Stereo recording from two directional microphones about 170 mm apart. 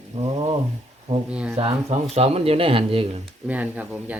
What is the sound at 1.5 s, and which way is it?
Speech, 40° right (ahead or behind).